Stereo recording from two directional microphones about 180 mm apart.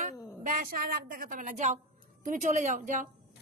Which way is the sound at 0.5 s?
50° right (ahead or behind).